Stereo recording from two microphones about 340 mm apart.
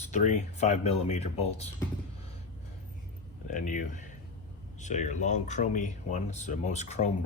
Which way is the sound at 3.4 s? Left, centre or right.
Left.